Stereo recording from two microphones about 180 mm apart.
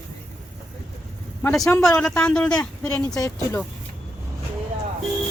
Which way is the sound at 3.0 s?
20° left (ahead or behind).